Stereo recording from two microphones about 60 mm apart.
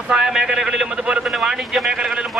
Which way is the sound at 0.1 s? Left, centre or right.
Centre.